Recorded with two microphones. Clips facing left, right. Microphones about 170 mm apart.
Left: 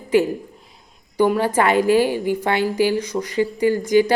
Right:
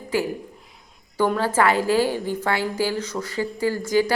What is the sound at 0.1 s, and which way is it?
A woman's voice, 20° left (ahead or behind).